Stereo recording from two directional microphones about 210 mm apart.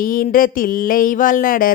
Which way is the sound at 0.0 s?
40° left (ahead or behind).